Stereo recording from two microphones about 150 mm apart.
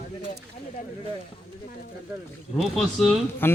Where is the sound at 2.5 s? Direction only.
Centre (ahead or behind).